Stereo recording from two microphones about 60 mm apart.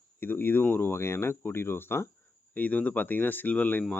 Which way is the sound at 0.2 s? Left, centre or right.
Left.